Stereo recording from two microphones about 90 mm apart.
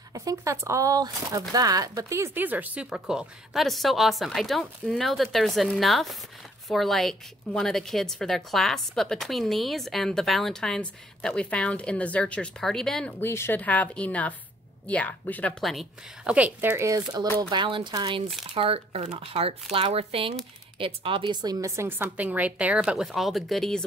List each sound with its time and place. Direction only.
0.1 s speech: 40° right (ahead or behind)
2.3 s a woman's voice: 20° right (ahead or behind); by 13.1 s 5° left (ahead or behind)
13.2 s speech: 25° left (ahead or behind)
13.6 s a woman's voice: 15° left (ahead or behind)
15.6 s a woman's voice: centre (ahead or behind)
16.3 s a woman's voice: 15° right (ahead or behind)
16.7 s speech: 35° right (ahead or behind)
17.4 s speech: 60° right (ahead or behind)
18.5 s speech: 90° right
20.7 s speech: 80° right
21.4 s a woman's voice: 40° right (ahead or behind); by 23.8 s 5° left (ahead or behind)